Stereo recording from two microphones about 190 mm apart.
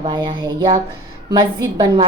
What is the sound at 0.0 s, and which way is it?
A woman's voice, 25° right (ahead or behind).